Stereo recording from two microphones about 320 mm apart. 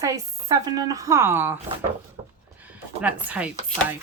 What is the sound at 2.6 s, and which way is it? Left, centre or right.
Speech, centre.